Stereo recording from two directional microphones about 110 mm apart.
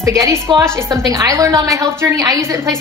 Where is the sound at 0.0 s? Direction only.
30° right (ahead or behind).